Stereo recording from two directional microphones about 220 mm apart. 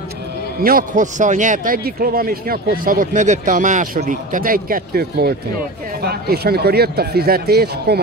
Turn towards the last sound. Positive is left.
turn(degrees=-45)  # may be behind; listen again after turning